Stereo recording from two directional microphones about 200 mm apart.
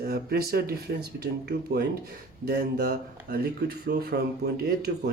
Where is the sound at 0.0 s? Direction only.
50° right (ahead or behind).